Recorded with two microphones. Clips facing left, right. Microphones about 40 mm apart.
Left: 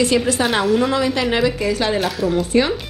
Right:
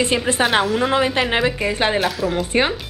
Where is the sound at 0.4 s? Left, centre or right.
Centre.